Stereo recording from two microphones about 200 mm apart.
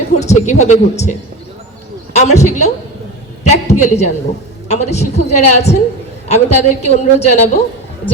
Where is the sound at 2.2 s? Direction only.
35° left (ahead or behind).